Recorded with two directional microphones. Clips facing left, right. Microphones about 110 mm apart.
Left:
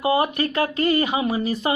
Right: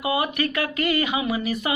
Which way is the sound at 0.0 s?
35° left (ahead or behind).